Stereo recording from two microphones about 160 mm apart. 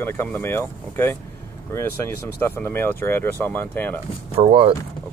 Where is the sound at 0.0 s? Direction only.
15° left (ahead or behind).